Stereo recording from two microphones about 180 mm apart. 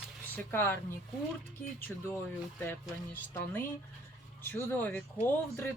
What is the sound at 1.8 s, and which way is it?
Speech, 15° left (ahead or behind).